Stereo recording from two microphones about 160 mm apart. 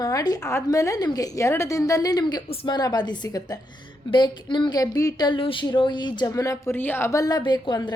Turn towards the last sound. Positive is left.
turn(degrees=25)  # may be behind; listen again after turning